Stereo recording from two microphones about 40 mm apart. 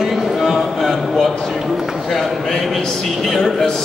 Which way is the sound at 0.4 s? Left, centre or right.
Centre.